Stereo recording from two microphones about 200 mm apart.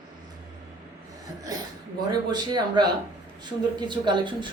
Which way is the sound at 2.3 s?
20° right (ahead or behind).